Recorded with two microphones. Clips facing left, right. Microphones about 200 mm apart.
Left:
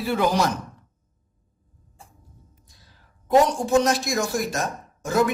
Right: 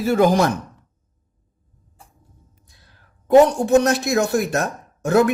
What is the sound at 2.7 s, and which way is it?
A woman's voice, 60° right (ahead or behind).